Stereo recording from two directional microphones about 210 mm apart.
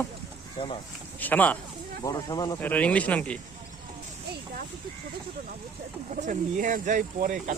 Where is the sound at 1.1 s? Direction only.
10° left (ahead or behind).